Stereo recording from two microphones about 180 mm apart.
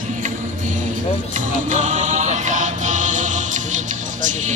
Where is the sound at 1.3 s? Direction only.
45° right (ahead or behind).